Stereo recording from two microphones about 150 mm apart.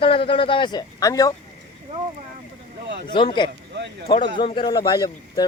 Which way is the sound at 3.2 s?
30° left (ahead or behind).